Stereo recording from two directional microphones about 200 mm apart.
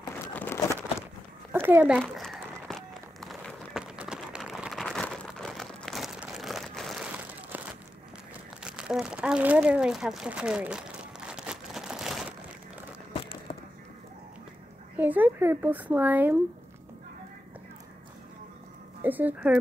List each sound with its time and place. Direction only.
0.3 s a sound: 10° left (ahead or behind)
1.5 s a child's voice: 10° right (ahead or behind)
2.7 s run: centre (ahead or behind)
8.6 s crumpling: 5° right (ahead or behind)
13.1 s a sound: 25° left (ahead or behind)
15.0 s speech: 10° right (ahead or behind)
19.0 s speech: 10° right (ahead or behind)